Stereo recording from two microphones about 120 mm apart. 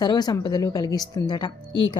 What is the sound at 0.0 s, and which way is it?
A woman's voice, 35° left (ahead or behind).